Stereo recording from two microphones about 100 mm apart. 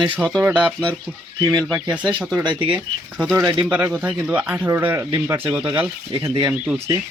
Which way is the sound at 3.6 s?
15° right (ahead or behind).